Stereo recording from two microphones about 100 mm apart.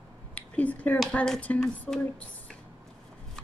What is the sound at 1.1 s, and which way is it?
Speech, 10° left (ahead or behind).